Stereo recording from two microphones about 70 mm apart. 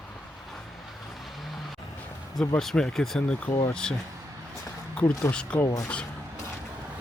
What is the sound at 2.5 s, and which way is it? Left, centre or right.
Speech, centre.